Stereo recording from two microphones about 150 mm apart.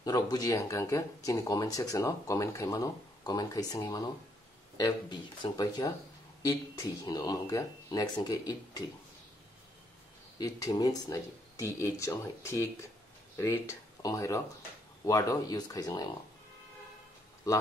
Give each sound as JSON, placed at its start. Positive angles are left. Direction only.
{"t": 0.0, "sound": "speech", "side_deg": 25}
{"t": 10.4, "sound": "speech", "side_deg": 25}